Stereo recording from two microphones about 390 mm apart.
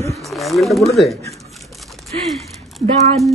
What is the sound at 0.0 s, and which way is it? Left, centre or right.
Speech, centre.